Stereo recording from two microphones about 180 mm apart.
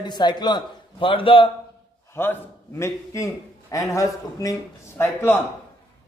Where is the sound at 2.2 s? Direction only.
15° left (ahead or behind).